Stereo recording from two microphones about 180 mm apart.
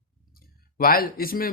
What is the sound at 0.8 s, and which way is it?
Speech, 55° left (ahead or behind).